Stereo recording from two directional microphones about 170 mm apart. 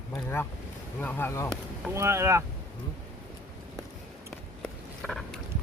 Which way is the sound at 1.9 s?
15° right (ahead or behind).